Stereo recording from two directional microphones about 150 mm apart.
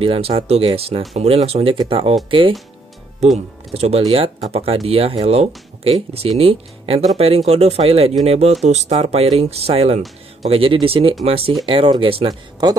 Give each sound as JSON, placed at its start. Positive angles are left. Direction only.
{"t": 0.0, "sound": "speech", "side_deg": -40}
{"t": 3.2, "sound": "speech", "side_deg": -45}